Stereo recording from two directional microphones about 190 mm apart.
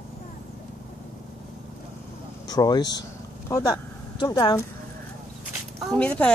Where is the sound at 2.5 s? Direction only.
20° left (ahead or behind).